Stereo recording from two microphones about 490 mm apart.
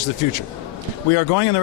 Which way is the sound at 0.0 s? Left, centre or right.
Left.